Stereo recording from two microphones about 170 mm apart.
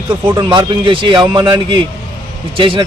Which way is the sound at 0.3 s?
25° right (ahead or behind).